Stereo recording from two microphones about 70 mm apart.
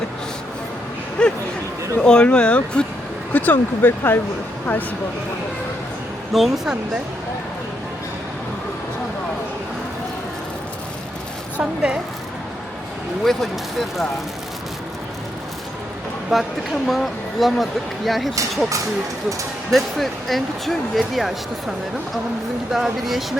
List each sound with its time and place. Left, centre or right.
1.2 s a sound: centre
2.0 s speech: centre; by 4.2 s left
6.3 s speech: centre
11.6 s speech: centre
16.3 s speech: centre
19.7 s speech: centre
22.7 s speech: centre